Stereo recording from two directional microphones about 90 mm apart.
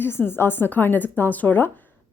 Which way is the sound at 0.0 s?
25° left (ahead or behind).